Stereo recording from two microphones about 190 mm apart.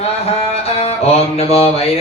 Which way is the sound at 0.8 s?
30° left (ahead or behind).